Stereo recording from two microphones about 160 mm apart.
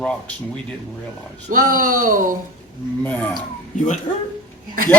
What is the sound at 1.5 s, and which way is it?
Speech, 60° right (ahead or behind).